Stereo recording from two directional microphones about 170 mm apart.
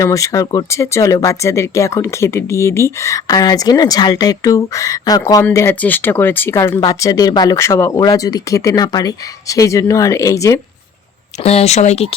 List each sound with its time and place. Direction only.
0.0 s speech: 20° left (ahead or behind)
11.4 s speech: 40° left (ahead or behind)